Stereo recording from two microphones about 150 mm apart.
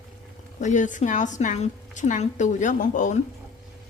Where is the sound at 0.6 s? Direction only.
55° left (ahead or behind).